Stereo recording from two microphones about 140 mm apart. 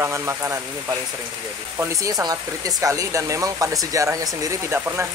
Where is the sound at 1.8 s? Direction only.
20° right (ahead or behind).